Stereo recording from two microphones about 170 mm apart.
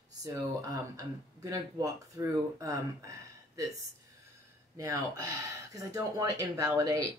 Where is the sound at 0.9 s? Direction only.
20° right (ahead or behind).